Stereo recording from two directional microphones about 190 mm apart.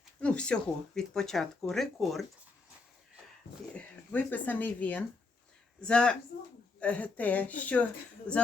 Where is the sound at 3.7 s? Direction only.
10° left (ahead or behind).